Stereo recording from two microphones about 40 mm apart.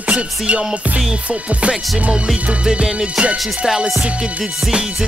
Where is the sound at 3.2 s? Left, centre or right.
Right.